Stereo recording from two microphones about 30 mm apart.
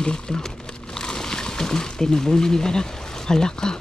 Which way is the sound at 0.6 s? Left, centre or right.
Left.